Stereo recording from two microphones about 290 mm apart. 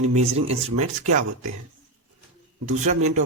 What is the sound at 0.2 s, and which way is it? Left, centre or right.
Speech, right.